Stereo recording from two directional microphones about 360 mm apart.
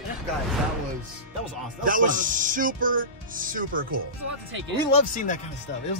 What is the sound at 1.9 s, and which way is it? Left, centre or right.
Speech, right.